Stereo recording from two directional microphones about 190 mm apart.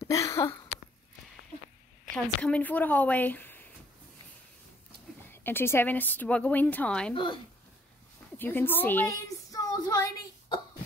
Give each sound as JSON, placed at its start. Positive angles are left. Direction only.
{"t": 0.1, "sound": "a sound", "side_deg": 15}
{"t": 2.1, "sound": "a woman's voice", "side_deg": 5}
{"t": 5.3, "sound": "a woman's voice", "side_deg": 10}
{"t": 8.4, "sound": "a woman's voice", "side_deg": 10}